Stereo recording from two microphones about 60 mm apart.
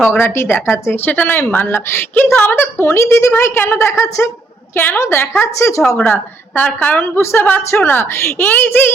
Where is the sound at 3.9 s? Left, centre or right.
Left.